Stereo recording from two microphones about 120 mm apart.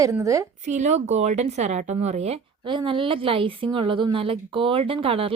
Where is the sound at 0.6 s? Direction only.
75° right (ahead or behind).